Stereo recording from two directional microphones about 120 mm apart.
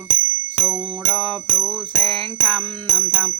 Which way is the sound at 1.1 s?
Centre (ahead or behind).